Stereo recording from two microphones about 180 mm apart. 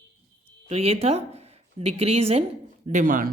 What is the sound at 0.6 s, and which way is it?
Speech, 35° right (ahead or behind).